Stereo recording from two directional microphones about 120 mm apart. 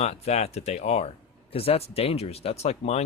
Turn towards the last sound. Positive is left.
turn(degrees=60)  # may be behind; listen again after turning